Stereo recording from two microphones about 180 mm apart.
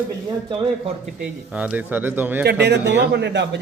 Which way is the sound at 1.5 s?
5° right (ahead or behind).